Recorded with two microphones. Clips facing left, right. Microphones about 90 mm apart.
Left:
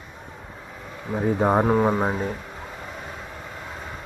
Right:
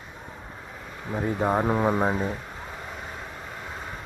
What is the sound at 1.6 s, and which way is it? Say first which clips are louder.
Speech: left 3 dB; 5° left (ahead or behind).